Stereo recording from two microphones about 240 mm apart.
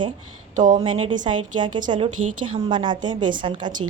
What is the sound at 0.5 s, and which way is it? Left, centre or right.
A woman's voice, right.